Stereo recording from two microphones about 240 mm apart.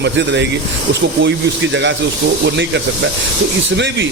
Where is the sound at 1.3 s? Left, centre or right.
Right.